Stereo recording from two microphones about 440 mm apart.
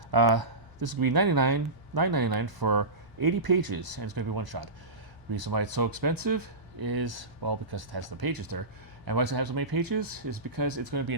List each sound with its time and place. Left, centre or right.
0.1 s speech: right